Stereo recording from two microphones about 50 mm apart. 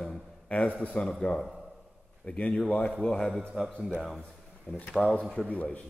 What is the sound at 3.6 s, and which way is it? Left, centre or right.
A man's voice, centre.